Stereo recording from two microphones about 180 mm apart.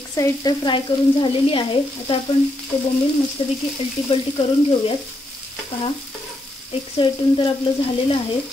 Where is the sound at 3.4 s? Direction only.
30° left (ahead or behind).